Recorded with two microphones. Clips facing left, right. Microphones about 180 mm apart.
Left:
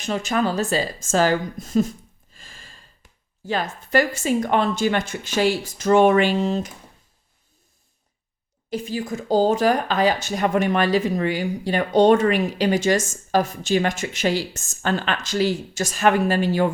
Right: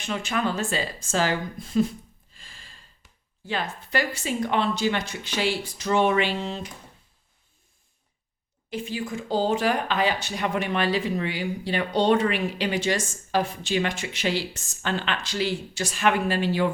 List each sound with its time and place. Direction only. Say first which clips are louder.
0.0 s a woman's voice: left 5 dB; 40° left (ahead or behind)
8.7 s speech: left 4 dB; 40° left (ahead or behind)